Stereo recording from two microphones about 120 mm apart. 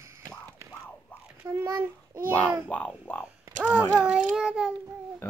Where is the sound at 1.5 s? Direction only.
20° right (ahead or behind).